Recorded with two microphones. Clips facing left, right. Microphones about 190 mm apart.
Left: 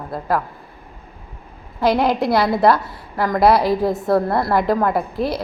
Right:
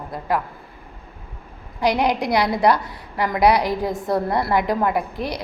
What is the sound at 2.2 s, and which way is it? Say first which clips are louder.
Speech: left 3 dB; 50° left (ahead or behind).